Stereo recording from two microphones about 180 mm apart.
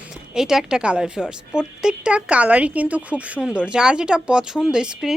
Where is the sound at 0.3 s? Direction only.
5° right (ahead or behind).